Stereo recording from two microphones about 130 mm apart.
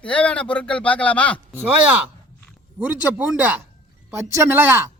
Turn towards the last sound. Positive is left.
turn(degrees=-15)  # may be behind; listen again after turning